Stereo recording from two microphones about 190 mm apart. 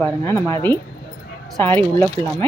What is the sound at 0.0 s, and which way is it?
A woman's voice, 10° left (ahead or behind).